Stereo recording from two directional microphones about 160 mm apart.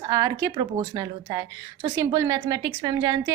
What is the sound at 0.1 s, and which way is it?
A woman's voice, 20° right (ahead or behind).